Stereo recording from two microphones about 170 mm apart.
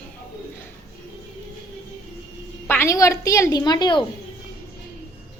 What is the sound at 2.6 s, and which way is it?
A woman's voice, 15° left (ahead or behind).